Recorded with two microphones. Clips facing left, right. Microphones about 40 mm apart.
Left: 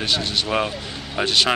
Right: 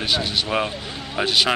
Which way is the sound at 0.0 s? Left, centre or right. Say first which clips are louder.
Even; centre.